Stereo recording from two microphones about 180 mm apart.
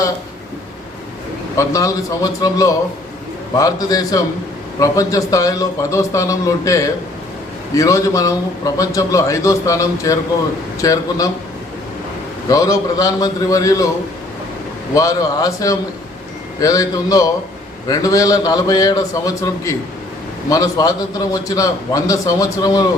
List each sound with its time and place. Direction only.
1.5 s a man's voice: 20° left (ahead or behind)
12.5 s a man's voice: 20° left (ahead or behind)
14.9 s a man's voice: 20° left (ahead or behind)